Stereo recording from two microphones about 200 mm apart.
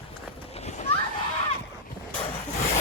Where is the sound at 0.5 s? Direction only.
35° left (ahead or behind).